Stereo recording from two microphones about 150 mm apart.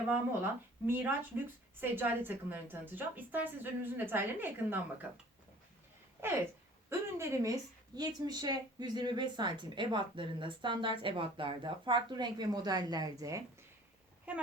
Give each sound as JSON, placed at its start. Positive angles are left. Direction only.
{"t": 0.1, "sound": "a woman's voice", "side_deg": -15}
{"t": 6.9, "sound": "a woman's voice", "side_deg": -20}